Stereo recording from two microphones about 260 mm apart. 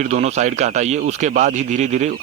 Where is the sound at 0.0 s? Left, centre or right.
Right.